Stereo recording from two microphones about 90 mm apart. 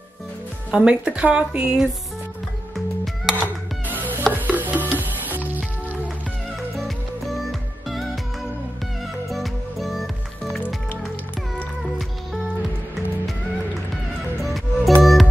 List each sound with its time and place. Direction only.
0.7 s a woman's voice: 10° right (ahead or behind)
3.9 s music: 20° right (ahead or behind)
9.3 s music: centre (ahead or behind)
14.4 s music: centre (ahead or behind)